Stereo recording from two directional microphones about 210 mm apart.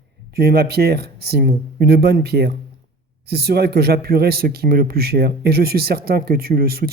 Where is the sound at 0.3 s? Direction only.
50° right (ahead or behind).